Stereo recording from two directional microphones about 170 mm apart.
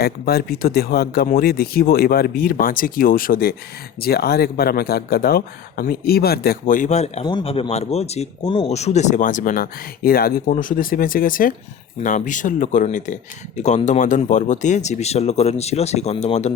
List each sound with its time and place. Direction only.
0.0 s speech: 65° left (ahead or behind); by 16.5 s 40° left (ahead or behind)